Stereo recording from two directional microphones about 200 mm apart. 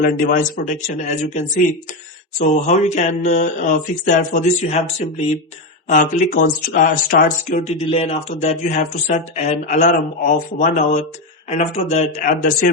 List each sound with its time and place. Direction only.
0.0 s speech: 45° left (ahead or behind)
2.6 s speech: 35° left (ahead or behind)